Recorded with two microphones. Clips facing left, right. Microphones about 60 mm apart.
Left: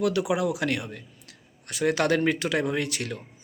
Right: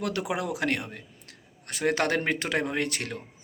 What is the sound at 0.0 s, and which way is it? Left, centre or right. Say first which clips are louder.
Speech: left 5 dB; right.